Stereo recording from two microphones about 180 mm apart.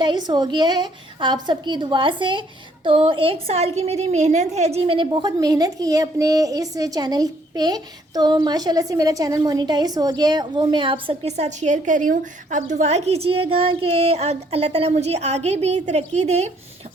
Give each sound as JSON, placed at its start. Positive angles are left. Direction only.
{"t": 0.0, "sound": "a woman's voice", "side_deg": -25}